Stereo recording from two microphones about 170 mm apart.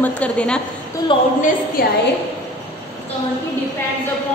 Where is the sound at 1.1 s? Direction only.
30° left (ahead or behind).